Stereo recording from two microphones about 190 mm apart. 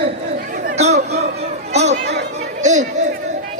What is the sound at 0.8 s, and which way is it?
Speech, 35° right (ahead or behind).